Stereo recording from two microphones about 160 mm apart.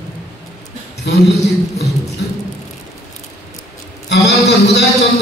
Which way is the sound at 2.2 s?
90° left.